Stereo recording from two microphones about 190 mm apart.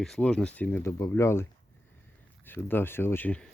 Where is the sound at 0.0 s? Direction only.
5° left (ahead or behind).